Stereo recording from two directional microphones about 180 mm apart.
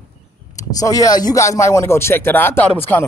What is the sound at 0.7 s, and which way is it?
Speech, 20° left (ahead or behind).